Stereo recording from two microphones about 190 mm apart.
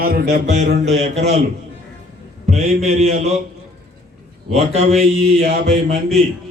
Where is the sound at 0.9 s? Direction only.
35° right (ahead or behind).